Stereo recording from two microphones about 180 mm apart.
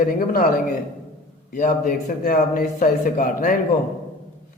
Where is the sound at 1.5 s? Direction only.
45° left (ahead or behind).